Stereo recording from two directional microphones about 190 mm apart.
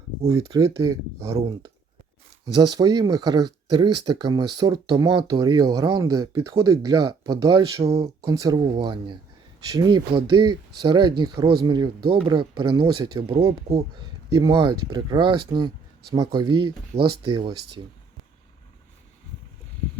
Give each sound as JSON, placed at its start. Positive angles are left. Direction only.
{"t": 0.3, "sound": "speech", "side_deg": -15}
{"t": 2.5, "sound": "speech", "side_deg": -20}